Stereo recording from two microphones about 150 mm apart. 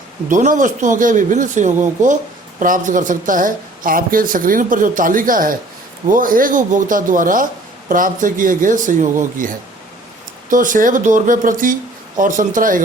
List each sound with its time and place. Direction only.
0.3 s speech: 60° right (ahead or behind)